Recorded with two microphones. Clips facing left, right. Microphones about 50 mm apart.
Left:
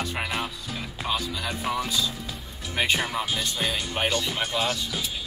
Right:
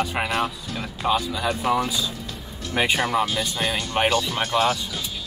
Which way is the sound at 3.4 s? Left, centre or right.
Centre.